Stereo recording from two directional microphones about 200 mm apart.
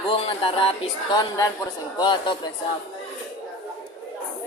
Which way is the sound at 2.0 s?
20° left (ahead or behind).